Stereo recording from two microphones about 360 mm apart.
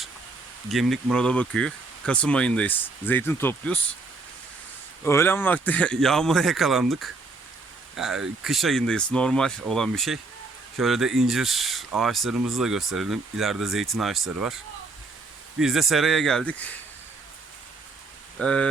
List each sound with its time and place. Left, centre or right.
0.7 s speech: centre
5.0 s speech: centre
18.3 s speech: centre